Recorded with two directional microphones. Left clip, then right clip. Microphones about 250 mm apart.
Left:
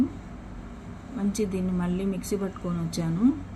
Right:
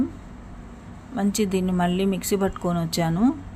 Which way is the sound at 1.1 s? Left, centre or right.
Right.